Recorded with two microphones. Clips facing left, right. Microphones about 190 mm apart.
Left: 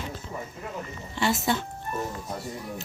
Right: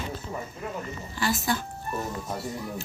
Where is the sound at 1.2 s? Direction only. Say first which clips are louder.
Left 2 dB; 25° left (ahead or behind).